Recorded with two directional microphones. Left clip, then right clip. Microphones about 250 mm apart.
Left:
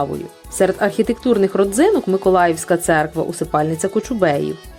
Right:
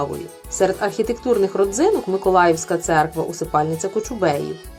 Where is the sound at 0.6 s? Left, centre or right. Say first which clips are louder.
Left 3 dB; left.